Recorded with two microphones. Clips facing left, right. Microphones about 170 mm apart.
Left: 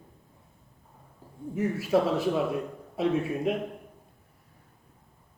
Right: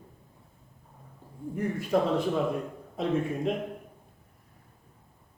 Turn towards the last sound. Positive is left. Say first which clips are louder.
# left 1 dB
turn(degrees=5)  # may be behind; listen again after turning